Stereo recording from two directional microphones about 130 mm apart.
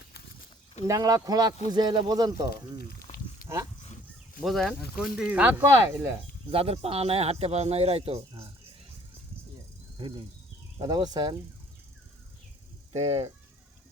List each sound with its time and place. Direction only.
0.9 s speech: 25° right (ahead or behind)
3.5 s speech: 20° right (ahead or behind)
4.4 s speech: centre (ahead or behind)
5.1 s speech: 10° right (ahead or behind)
6.5 s a man's voice: 50° right (ahead or behind)
10.8 s speech: 30° right (ahead or behind)
12.9 s speech: 55° right (ahead or behind)